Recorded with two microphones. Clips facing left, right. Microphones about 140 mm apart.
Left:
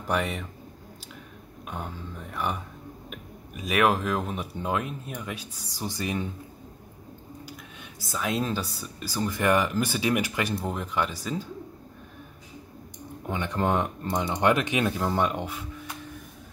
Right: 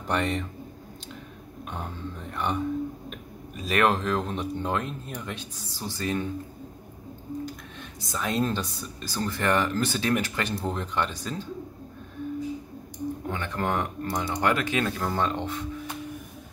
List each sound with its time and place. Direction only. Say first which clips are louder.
0.0 s speech: right 1 dB; 5° left (ahead or behind)
1.7 s speech: right 1 dB; 5° left (ahead or behind)
8.1 s speech: right 1 dB; 5° left (ahead or behind)
13.3 s speech: left 4 dB; 15° left (ahead or behind)